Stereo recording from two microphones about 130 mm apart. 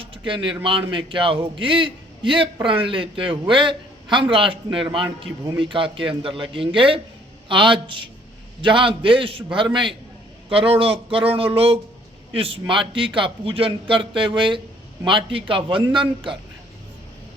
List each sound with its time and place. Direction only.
0.0 s a man's voice: 40° right (ahead or behind)